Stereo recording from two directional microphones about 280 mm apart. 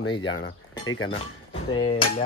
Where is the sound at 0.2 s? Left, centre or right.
Left.